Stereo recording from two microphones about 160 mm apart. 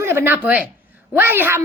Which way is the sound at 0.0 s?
15° right (ahead or behind).